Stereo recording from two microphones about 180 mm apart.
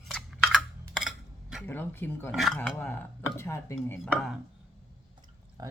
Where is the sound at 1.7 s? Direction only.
10° left (ahead or behind).